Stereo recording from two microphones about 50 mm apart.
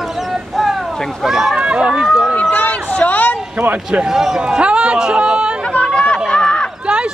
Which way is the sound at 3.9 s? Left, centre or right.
Centre.